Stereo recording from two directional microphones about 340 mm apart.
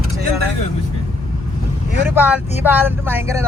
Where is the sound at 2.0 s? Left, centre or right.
Centre.